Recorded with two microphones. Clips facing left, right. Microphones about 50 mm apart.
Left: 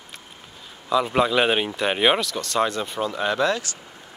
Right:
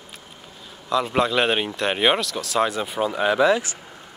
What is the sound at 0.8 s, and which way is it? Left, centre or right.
Speech, centre.